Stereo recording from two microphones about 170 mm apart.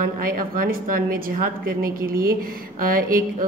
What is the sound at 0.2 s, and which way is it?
Speech, 55° right (ahead or behind).